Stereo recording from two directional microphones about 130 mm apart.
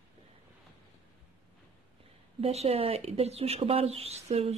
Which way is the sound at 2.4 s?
50° right (ahead or behind).